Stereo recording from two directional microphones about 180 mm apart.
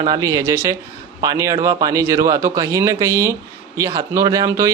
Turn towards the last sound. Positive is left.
turn(degrees=-20)  # may be behind; listen again after turning